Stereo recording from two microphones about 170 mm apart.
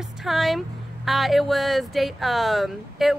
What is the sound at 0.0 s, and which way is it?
Speech, centre (ahead or behind).